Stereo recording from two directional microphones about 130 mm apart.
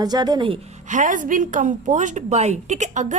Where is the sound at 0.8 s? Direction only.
75° right (ahead or behind).